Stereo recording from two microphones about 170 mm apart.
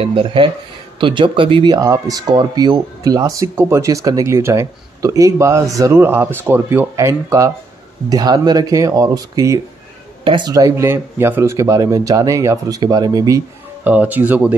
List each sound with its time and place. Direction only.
0.0 s speech: 30° right (ahead or behind)
13.8 s speech: 10° right (ahead or behind)